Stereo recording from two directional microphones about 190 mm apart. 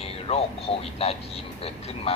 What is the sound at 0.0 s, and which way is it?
Speech, 30° left (ahead or behind).